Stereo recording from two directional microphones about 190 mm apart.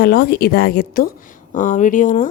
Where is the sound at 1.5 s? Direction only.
40° left (ahead or behind).